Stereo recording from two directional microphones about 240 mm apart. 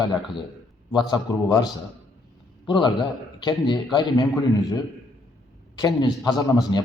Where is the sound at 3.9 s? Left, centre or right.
Centre.